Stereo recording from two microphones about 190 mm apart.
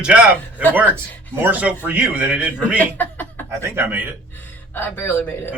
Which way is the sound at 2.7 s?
10° left (ahead or behind).